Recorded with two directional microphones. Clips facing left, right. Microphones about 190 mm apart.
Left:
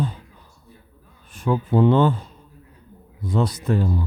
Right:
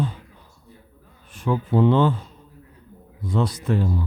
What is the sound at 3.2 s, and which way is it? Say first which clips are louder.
Speech: left 1 dB; 40° left (ahead or behind).